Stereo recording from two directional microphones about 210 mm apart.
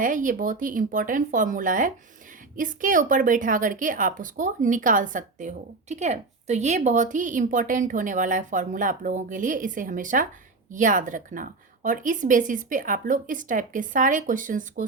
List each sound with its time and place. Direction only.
0.0 s a woman's voice: 40° right (ahead or behind)